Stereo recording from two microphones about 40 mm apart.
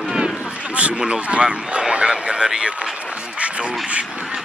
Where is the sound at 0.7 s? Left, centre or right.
Right.